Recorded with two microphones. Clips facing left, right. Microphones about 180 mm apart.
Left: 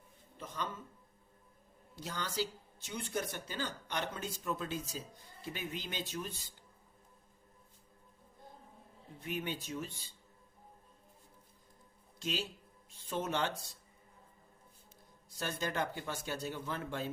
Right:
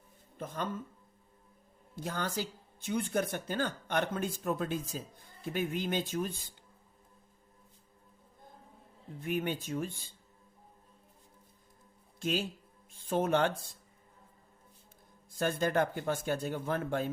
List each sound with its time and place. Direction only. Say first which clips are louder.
0.3 s a woman's voice: right 4 dB; 50° right (ahead or behind)
2.0 s speech: right 3 dB; 50° right (ahead or behind)
9.2 s speech: right 6 dB; 50° right (ahead or behind)
12.2 s speech: right 6 dB; 50° right (ahead or behind)
15.3 s speech: right 8 dB; 50° right (ahead or behind)